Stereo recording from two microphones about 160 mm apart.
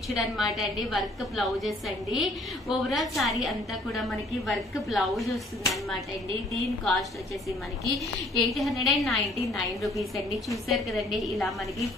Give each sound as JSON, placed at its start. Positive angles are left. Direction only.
{"t": 0.1, "sound": "a woman's voice", "side_deg": 0}
{"t": 6.5, "sound": "a woman's voice", "side_deg": 0}